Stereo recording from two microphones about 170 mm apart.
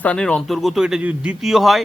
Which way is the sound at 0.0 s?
5° left (ahead or behind).